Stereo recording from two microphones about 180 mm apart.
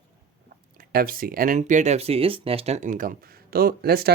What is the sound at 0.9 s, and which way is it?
Speech, 55° right (ahead or behind).